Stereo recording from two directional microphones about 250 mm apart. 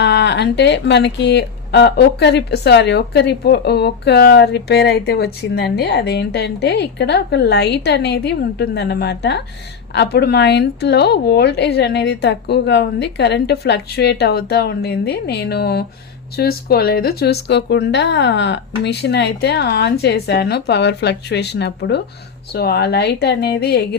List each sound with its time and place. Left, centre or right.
0.0 s speech: left